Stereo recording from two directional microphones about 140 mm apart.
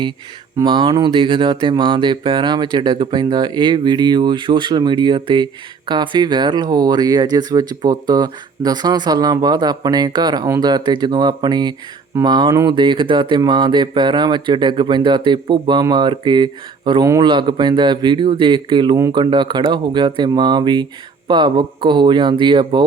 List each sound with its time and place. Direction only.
0.5 s speech: 30° right (ahead or behind)